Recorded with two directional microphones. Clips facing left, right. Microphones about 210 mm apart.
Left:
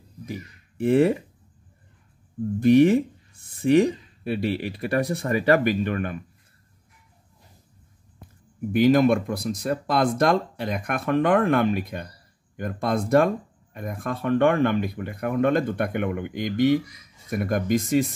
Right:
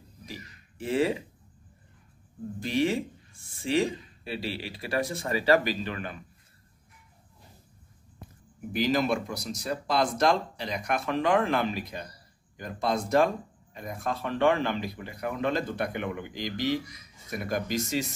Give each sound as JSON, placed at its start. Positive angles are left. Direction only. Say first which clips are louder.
{"t": 0.3, "sound": "speech", "louder": "left 8 dB", "side_deg": 60}
{"t": 2.6, "sound": "speech", "louder": "left 11 dB", "side_deg": 55}
{"t": 8.7, "sound": "speech", "louder": "left 8 dB", "side_deg": 55}